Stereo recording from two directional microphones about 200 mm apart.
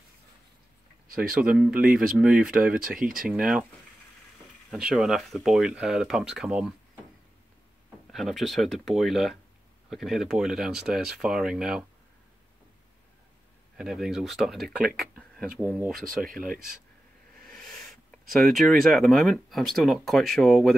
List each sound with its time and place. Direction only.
1.3 s speech: 5° right (ahead or behind)
4.6 s speech: 5° right (ahead or behind)
8.1 s speech: centre (ahead or behind)
13.7 s speech: centre (ahead or behind)
16.2 s speech: 45° right (ahead or behind)
18.3 s speech: centre (ahead or behind)